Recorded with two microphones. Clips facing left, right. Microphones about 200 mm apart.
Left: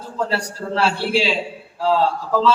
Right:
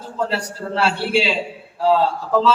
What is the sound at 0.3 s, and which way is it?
Speech, 5° right (ahead or behind).